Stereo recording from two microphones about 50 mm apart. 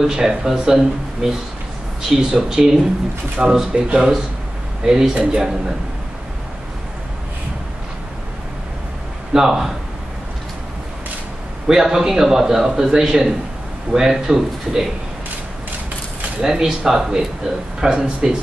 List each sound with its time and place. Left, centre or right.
0.0 s a man's voice: centre
9.3 s a man's voice: centre
11.6 s a man's voice: centre
16.4 s a man's voice: centre